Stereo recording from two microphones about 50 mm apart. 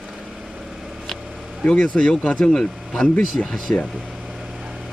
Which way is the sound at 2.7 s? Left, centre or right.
Centre.